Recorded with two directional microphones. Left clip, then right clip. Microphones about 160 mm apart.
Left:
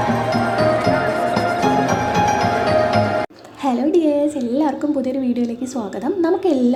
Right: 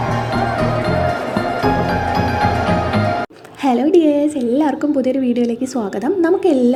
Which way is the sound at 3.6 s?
20° right (ahead or behind).